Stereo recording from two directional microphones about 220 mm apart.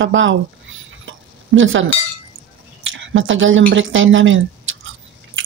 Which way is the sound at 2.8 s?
60° right (ahead or behind).